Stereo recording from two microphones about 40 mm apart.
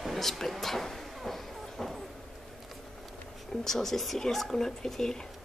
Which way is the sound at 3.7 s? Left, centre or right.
Centre.